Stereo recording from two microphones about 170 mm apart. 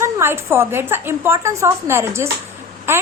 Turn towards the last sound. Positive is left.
turn(degrees=-15)  # may be behind; listen again after turning